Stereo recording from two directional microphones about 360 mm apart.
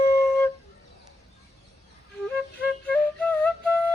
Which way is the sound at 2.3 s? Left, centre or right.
Centre.